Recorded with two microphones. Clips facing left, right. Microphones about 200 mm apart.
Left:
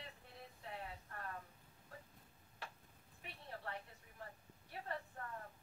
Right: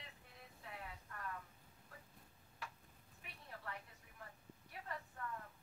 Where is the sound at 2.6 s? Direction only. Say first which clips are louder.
Even; 30° left (ahead or behind).